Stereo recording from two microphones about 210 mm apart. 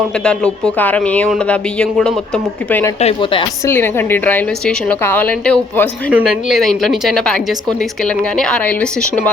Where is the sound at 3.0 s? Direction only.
25° left (ahead or behind).